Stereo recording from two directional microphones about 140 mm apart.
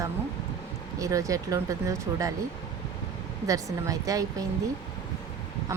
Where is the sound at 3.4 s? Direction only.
25° right (ahead or behind).